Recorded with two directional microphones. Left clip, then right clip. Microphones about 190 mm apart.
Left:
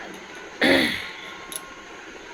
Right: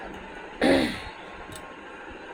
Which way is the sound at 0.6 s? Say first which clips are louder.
Left 3 dB; 10° right (ahead or behind).